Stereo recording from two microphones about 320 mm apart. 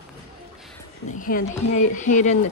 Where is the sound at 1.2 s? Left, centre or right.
Left.